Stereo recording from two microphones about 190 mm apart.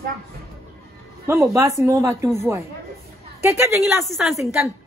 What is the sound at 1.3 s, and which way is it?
Speech, 15° right (ahead or behind).